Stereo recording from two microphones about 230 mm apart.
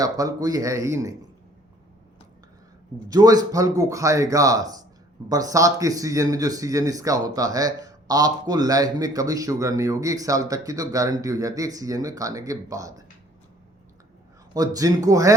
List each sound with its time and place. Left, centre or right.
0.0 s speech: centre
3.1 s speech: centre
14.5 s speech: centre